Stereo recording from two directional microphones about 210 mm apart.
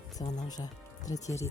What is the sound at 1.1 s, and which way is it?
Speech, 75° left (ahead or behind).